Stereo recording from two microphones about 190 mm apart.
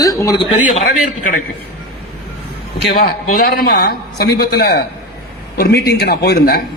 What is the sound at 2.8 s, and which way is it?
A man's voice, 55° left (ahead or behind).